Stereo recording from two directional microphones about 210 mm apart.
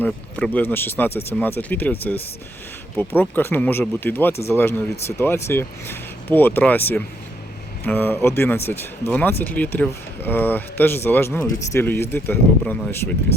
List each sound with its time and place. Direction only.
0.0 s speech: 5° left (ahead or behind)